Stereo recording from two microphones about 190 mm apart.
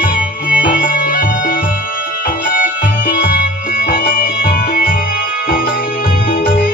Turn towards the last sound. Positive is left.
turn(degrees=45)  # may be behind; listen again after turning